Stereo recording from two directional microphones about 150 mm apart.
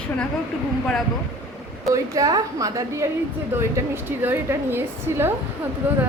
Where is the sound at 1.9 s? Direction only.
20° right (ahead or behind).